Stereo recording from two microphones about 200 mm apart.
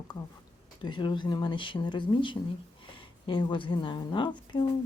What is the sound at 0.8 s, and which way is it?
A woman's voice, 25° left (ahead or behind).